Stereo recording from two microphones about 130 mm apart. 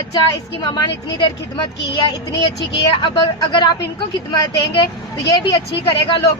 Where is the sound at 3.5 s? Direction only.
35° left (ahead or behind).